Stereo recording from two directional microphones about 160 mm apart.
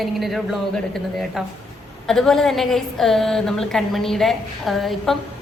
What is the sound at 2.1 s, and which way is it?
A woman's voice, centre (ahead or behind).